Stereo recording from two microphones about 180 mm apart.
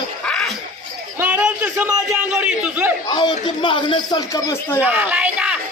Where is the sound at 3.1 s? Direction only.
25° left (ahead or behind).